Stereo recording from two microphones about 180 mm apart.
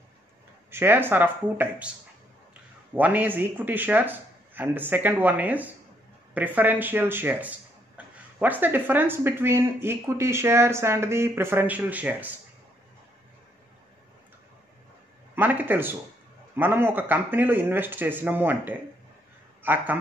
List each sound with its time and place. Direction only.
0.7 s speech: 15° right (ahead or behind)
8.0 s a sound: 5° right (ahead or behind)
8.4 s speech: 10° right (ahead or behind)
15.3 s speech: 10° right (ahead or behind)